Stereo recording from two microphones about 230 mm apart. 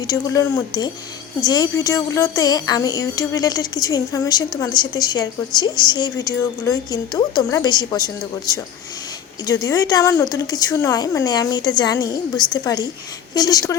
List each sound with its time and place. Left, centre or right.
0.1 s speech: centre